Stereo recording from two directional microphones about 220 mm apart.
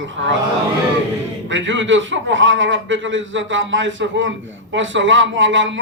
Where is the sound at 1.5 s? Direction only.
55° right (ahead or behind).